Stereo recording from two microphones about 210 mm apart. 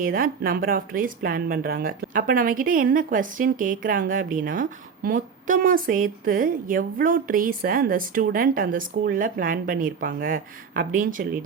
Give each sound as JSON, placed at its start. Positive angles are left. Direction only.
{"t": 0.0, "sound": "speech", "side_deg": -40}